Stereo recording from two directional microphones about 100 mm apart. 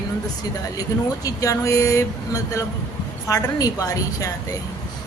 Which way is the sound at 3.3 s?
35° left (ahead or behind).